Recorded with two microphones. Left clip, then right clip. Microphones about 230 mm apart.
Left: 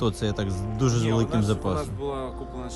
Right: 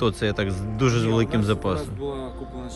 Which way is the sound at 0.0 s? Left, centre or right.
Centre.